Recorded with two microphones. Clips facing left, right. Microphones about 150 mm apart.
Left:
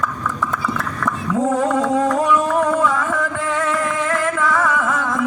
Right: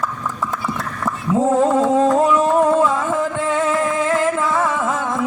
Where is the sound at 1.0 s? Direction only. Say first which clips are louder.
Right 2 dB; 25° right (ahead or behind).